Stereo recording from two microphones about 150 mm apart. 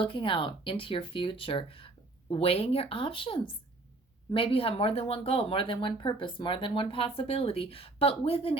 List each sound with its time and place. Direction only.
0.0 s speech: 35° left (ahead or behind)